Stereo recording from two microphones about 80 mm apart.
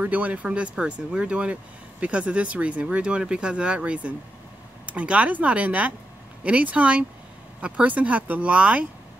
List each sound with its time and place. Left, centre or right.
0.0 s speech: centre